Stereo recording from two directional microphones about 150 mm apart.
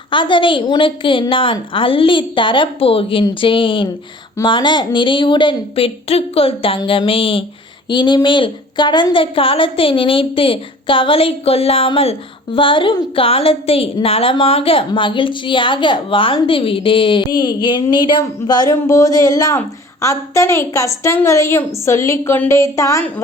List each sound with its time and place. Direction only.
0.1 s a woman's voice: 35° left (ahead or behind); by 23.2 s 15° left (ahead or behind)